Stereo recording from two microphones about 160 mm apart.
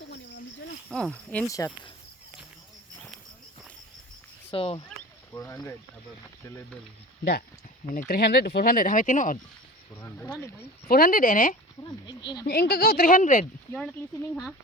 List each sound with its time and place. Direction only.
0.9 s speech: 5° left (ahead or behind)
1.5 s speech: 20° left (ahead or behind)
4.5 s speech: 35° left (ahead or behind)
5.4 s speech: 20° left (ahead or behind)
7.9 s speech: 65° left (ahead or behind)
10.0 s speech: 10° left (ahead or behind)
10.8 s speech: 65° left (ahead or behind)
11.8 s speech: 25° left (ahead or behind)
12.5 s a woman's voice: 75° left (ahead or behind); by 13.5 s 50° left (ahead or behind)